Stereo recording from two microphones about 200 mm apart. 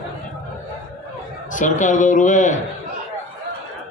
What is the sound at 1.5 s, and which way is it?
A man's voice, 40° left (ahead or behind).